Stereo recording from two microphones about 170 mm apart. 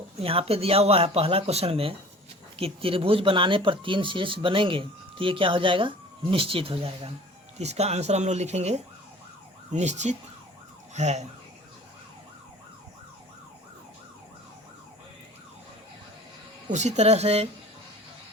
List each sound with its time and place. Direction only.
0.2 s speech: 35° right (ahead or behind)
16.7 s speech: 40° right (ahead or behind)